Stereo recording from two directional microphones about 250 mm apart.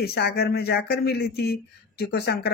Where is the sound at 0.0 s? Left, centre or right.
Left.